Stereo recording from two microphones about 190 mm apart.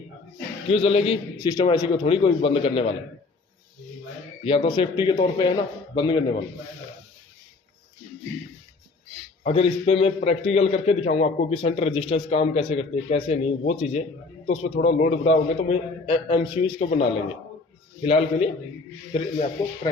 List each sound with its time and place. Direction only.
0.7 s a man's voice: 30° left (ahead or behind)
4.4 s a man's voice: 25° left (ahead or behind)
9.4 s a man's voice: 30° left (ahead or behind)